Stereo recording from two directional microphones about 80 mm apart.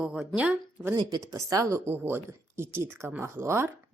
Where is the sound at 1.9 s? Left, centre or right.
Right.